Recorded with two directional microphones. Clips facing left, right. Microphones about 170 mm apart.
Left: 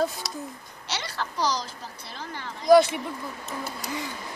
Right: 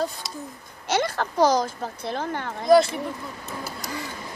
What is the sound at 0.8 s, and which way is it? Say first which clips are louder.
A woman's voice: right 9 dB; 50° right (ahead or behind).